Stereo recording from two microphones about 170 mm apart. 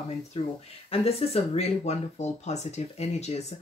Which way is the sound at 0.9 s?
35° left (ahead or behind).